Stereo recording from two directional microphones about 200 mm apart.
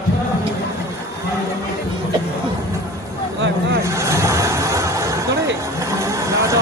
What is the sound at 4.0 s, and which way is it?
Vehicle, 15° right (ahead or behind).